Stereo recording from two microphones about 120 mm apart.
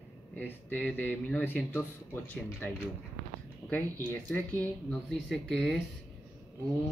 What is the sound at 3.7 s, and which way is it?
Speech, 15° left (ahead or behind).